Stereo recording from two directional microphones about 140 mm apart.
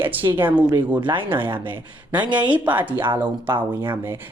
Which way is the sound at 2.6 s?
10° right (ahead or behind).